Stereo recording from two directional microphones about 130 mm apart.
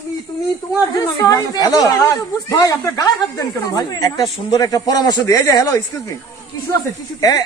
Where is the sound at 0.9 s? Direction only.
30° left (ahead or behind).